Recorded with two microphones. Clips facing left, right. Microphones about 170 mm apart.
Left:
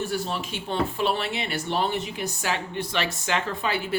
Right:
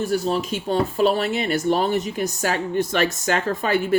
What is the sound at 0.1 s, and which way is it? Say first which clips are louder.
Speech: right 7 dB; 40° right (ahead or behind).